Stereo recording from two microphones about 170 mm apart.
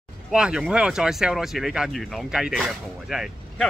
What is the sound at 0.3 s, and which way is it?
Speech, 5° right (ahead or behind).